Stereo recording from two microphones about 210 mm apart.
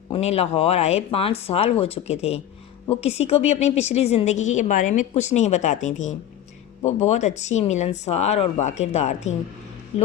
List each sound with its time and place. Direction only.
0.1 s a woman's voice: 30° left (ahead or behind)